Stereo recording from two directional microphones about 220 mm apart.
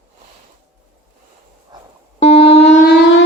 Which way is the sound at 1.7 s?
20° right (ahead or behind).